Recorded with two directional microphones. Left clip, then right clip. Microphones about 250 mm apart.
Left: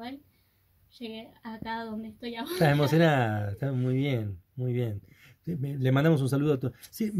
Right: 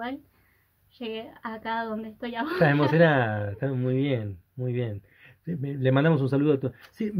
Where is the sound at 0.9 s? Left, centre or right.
Centre.